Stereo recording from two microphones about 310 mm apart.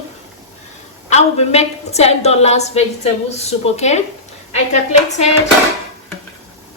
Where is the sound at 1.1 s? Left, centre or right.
Left.